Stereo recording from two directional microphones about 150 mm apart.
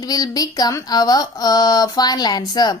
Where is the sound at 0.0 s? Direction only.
25° left (ahead or behind).